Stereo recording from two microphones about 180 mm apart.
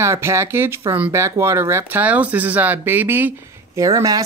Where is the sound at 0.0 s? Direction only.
15° right (ahead or behind).